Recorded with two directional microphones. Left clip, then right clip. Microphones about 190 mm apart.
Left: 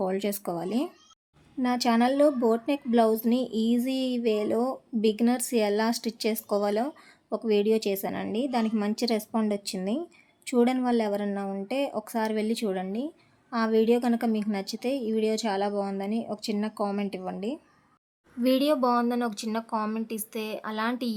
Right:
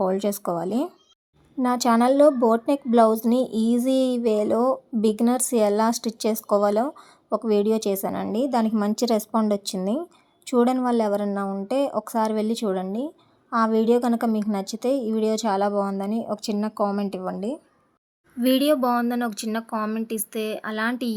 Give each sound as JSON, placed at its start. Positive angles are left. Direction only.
{"t": 0.0, "sound": "a woman's voice", "side_deg": -20}
{"t": 8.4, "sound": "a woman's voice", "side_deg": -25}